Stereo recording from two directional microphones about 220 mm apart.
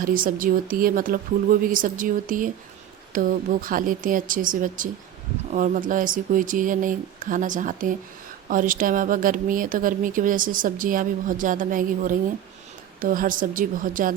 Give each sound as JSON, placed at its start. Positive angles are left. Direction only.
{"t": 0.0, "sound": "speech", "side_deg": -40}